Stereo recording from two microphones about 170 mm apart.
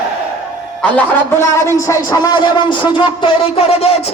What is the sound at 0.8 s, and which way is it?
A man's voice, 10° left (ahead or behind).